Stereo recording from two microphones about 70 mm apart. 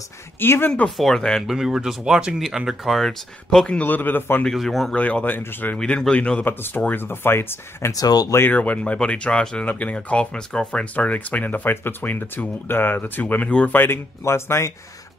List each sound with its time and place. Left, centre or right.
0.4 s speech: left
0.8 s speech: centre
1.5 s speech: centre
3.8 s speech: left
4.5 s speech: centre
4.9 s speech: left
5.8 s speech: centre
6.4 s speech: left
7.9 s speech: left
8.5 s speech: centre
13.7 s speech: left